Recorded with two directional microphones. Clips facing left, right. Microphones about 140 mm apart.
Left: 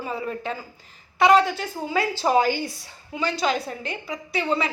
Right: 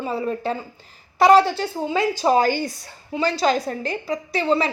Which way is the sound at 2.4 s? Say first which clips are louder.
Right 2 dB; 45° right (ahead or behind).